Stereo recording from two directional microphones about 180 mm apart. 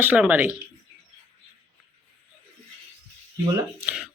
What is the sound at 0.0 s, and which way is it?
Speech, 5° right (ahead or behind).